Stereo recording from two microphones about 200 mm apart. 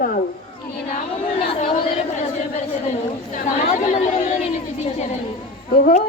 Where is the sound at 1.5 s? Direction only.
25° left (ahead or behind).